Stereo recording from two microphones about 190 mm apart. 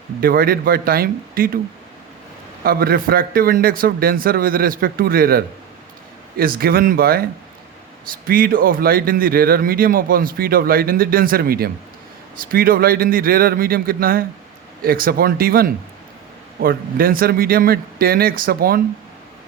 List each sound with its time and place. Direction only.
0.2 s speech: 50° right (ahead or behind)
2.6 s speech: 50° right (ahead or behind)
8.3 s speech: 50° right (ahead or behind)